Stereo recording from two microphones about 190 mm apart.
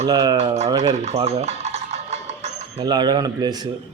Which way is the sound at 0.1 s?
20° right (ahead or behind).